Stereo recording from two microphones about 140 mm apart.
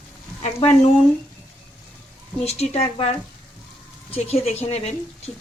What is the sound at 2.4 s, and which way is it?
Speech, 50° left (ahead or behind).